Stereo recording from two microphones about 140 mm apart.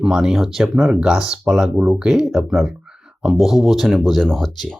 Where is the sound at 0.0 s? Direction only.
5° right (ahead or behind).